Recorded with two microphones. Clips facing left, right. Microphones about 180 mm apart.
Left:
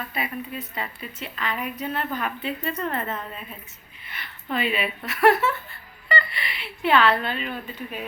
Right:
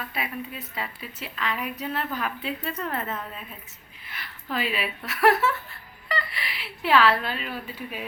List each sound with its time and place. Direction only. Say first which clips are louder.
0.1 s speech: left 2 dB; centre (ahead or behind)